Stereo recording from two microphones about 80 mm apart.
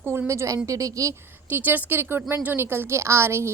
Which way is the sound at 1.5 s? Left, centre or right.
Right.